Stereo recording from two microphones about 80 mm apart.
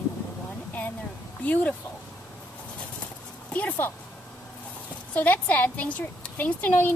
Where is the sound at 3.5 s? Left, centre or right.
Centre.